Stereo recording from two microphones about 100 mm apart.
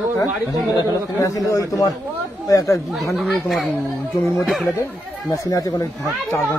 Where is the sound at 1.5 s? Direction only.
35° left (ahead or behind).